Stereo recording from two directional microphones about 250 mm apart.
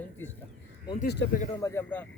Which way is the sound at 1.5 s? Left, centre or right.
Centre.